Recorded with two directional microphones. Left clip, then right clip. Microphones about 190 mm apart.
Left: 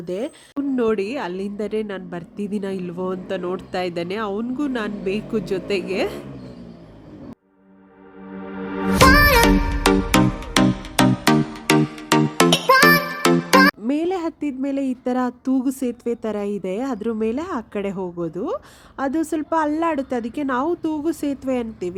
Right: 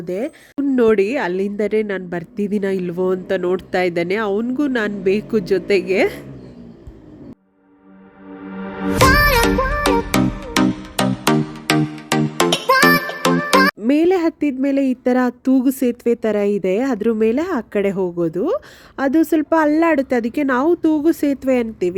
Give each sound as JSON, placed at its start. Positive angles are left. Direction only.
{"t": 0.0, "sound": "speech", "side_deg": -10}
{"t": 9.0, "sound": "music", "side_deg": 0}
{"t": 13.8, "sound": "speech", "side_deg": -15}